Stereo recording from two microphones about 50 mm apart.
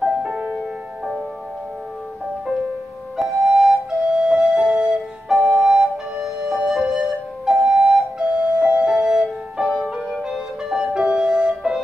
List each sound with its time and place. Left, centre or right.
0.0 s music: centre
0.3 s music: right
3.2 s flute: centre
7.6 s music: right